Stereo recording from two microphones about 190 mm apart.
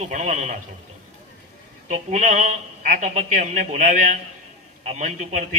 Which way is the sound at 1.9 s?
40° right (ahead or behind).